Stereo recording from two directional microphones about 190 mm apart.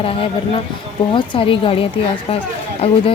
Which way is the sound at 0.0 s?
30° left (ahead or behind).